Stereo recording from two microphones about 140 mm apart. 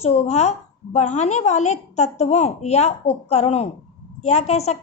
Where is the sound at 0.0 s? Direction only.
50° left (ahead or behind).